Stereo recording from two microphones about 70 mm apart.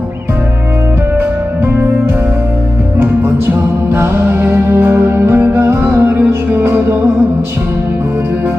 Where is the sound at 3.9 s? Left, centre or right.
Right.